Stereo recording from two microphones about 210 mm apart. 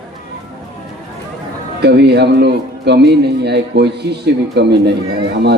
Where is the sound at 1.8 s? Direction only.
50° right (ahead or behind).